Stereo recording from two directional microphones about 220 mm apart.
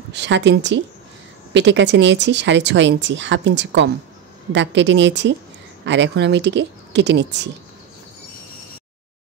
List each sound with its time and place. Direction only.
0.1 s speech: 55° right (ahead or behind)